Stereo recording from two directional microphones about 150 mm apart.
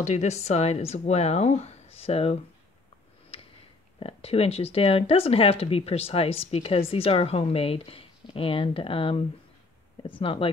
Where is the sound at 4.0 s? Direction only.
40° left (ahead or behind).